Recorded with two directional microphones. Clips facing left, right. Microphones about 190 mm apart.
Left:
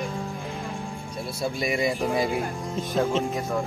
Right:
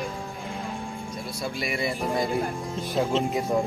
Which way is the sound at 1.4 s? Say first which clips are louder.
Left 4 dB; 20° left (ahead or behind).